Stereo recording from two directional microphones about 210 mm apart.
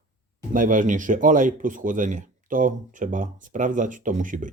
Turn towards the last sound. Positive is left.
turn(degrees=-40)  # may be behind; listen again after turning